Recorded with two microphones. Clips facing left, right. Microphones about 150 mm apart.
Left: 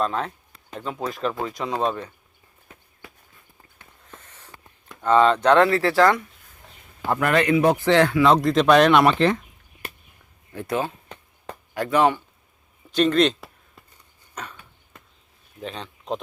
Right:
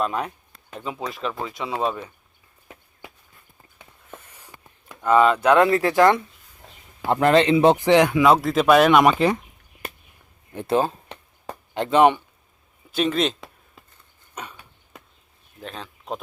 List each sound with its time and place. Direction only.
0.0 s speech: 15° right (ahead or behind)
3.8 s a sound: 10° right (ahead or behind)
5.0 s speech: 10° right (ahead or behind)
10.5 s speech: 20° right (ahead or behind)
10.8 s chop: 35° right (ahead or behind)
12.9 s a sound: 5° right (ahead or behind)
14.3 s dog: 10° right (ahead or behind)
15.6 s speech: centre (ahead or behind)